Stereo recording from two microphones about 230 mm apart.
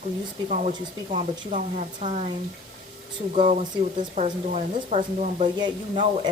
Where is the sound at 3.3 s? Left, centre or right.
Right.